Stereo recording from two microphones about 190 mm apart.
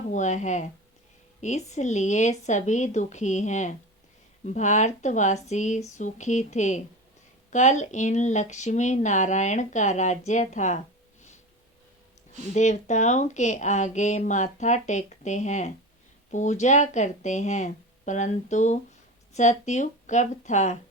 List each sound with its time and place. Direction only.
0.1 s speech: 40° left (ahead or behind)
12.5 s speech: 40° left (ahead or behind)